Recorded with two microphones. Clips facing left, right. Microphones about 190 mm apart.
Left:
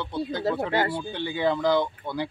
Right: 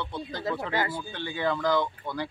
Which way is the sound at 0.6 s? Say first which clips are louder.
Left 4 dB; 30° left (ahead or behind).